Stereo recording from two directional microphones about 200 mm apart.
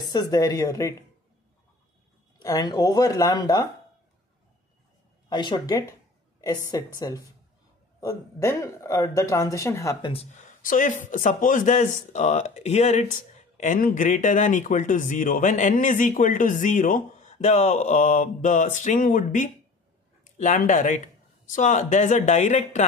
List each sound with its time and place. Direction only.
0.0 s speech: 20° left (ahead or behind)
2.4 s speech: 20° left (ahead or behind)
5.3 s speech: 20° left (ahead or behind)
10.1 s a man's voice: 40° left (ahead or behind)